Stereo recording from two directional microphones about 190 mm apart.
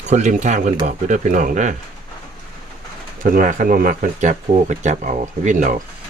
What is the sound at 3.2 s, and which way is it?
Speech, 45° right (ahead or behind).